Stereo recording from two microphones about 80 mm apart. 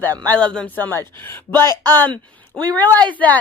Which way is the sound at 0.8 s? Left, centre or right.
Left.